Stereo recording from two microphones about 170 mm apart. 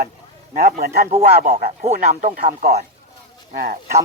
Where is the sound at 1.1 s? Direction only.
45° right (ahead or behind).